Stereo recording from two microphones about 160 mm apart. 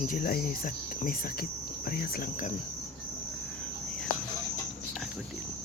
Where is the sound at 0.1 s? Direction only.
65° left (ahead or behind).